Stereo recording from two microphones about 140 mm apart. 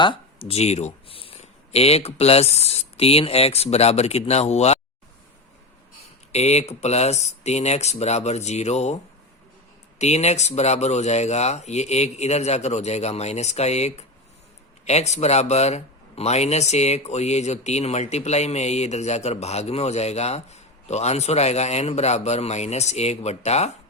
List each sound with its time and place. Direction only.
0.0 s speech: 40° left (ahead or behind)
6.3 s speech: 50° left (ahead or behind)
10.0 s speech: 50° left (ahead or behind)